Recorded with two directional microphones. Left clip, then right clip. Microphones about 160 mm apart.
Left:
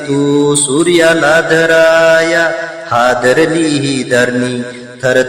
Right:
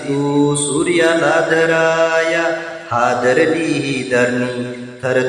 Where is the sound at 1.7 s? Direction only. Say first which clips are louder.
Left 7 dB; 35° left (ahead or behind).